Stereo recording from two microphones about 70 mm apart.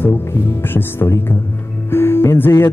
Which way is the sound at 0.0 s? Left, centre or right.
Left.